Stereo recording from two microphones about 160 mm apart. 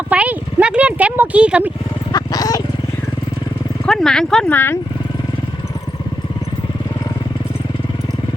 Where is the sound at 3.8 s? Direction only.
5° left (ahead or behind).